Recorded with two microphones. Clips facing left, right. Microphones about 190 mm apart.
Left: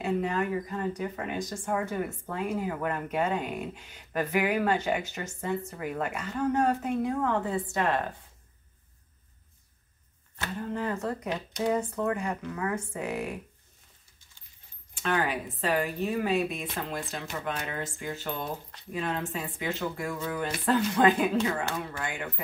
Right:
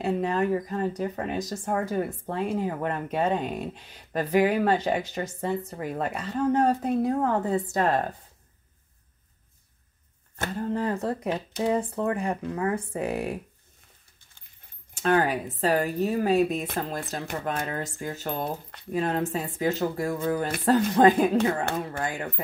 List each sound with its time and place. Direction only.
0.0 s speech: 35° right (ahead or behind)
10.3 s speech: 40° right (ahead or behind)
15.0 s speech: 40° right (ahead or behind)